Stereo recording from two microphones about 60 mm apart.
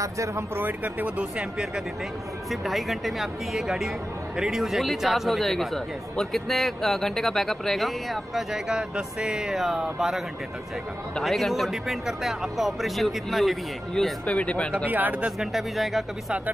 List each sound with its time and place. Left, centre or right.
0.0 s speech: right
0.6 s speech: right
1.0 s speech: centre
2.5 s speech: centre
11.2 s speech: centre
14.2 s speech: centre
14.9 s speech: right
15.3 s speech: centre